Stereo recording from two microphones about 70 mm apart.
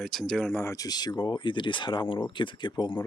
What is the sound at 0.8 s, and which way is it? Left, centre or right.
Speech, left.